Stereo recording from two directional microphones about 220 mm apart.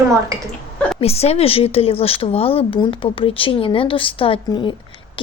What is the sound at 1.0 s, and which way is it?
Speech, 25° left (ahead or behind).